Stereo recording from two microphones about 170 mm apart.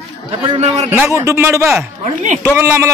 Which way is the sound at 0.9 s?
15° right (ahead or behind).